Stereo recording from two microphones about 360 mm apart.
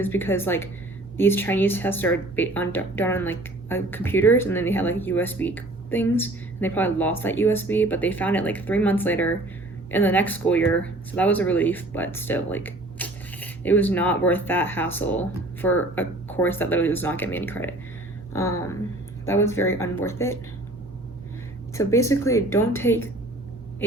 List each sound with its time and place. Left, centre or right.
0.0 s a woman's voice: centre
21.8 s a woman's voice: centre